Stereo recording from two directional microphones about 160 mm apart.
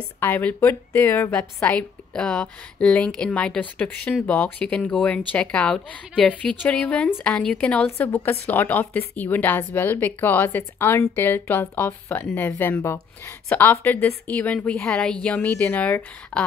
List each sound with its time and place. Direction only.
0.2 s a woman's voice: 10° left (ahead or behind)